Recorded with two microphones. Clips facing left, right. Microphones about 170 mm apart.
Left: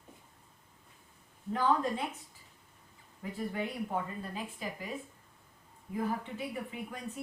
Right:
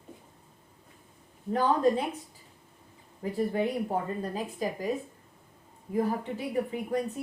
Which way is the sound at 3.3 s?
35° right (ahead or behind).